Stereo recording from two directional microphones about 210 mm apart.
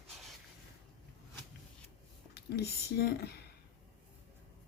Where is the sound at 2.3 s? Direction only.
50° left (ahead or behind).